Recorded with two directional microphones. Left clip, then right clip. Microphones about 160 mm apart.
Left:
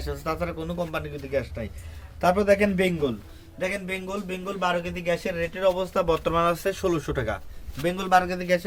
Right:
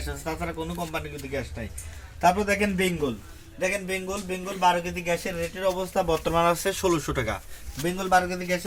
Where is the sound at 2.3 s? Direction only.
30° left (ahead or behind).